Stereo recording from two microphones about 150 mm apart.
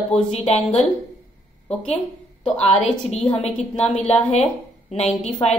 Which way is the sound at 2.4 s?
45° left (ahead or behind).